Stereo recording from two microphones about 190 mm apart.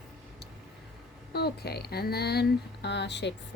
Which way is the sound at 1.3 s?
55° left (ahead or behind).